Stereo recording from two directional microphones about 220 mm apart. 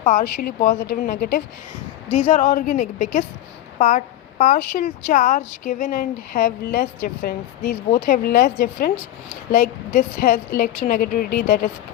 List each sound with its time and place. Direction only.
0.0 s speech: 35° left (ahead or behind)
2.1 s speech: 35° left (ahead or behind)